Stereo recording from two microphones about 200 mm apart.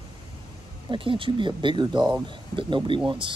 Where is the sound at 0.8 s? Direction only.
25° right (ahead or behind).